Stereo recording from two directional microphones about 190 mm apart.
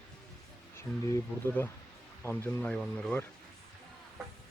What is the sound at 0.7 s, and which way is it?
Speech, 15° left (ahead or behind).